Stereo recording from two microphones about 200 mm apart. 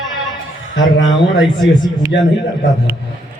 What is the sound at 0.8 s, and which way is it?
Speech, 70° left (ahead or behind).